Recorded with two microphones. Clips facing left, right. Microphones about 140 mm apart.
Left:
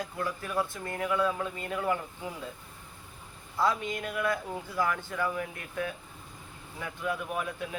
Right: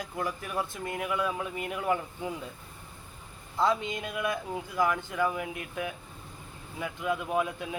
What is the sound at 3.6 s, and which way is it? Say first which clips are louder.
Speech: right 1 dB; 20° right (ahead or behind).